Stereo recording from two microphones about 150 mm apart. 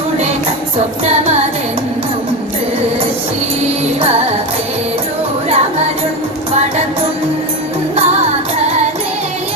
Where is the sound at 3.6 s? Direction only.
45° right (ahead or behind).